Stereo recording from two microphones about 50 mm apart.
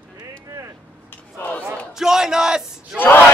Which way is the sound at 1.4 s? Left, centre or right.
Left.